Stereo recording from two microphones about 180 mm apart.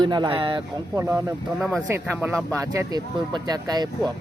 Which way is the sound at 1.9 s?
10° right (ahead or behind).